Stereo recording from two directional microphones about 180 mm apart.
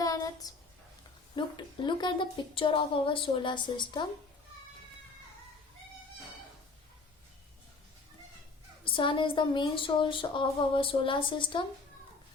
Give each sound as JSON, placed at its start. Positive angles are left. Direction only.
{"t": 0.0, "sound": "a sound", "side_deg": 20}
{"t": 1.4, "sound": "a woman's voice", "side_deg": 25}
{"t": 8.8, "sound": "a woman's voice", "side_deg": 30}